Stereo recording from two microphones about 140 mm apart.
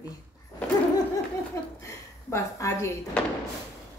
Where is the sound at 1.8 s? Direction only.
20° left (ahead or behind).